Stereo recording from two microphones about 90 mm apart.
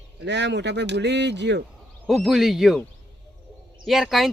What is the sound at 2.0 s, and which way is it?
Speech, 5° right (ahead or behind).